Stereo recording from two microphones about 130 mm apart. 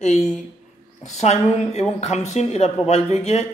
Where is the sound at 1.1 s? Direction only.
60° left (ahead or behind).